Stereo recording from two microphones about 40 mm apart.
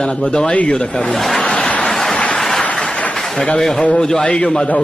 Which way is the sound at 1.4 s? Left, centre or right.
Left.